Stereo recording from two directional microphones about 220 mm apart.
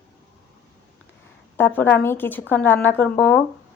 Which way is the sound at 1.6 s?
10° left (ahead or behind).